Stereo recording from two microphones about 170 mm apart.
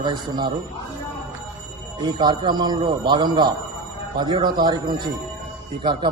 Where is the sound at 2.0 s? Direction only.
25° right (ahead or behind).